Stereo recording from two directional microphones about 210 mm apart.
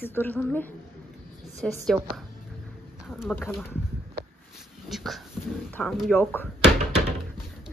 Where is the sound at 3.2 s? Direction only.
5° left (ahead or behind).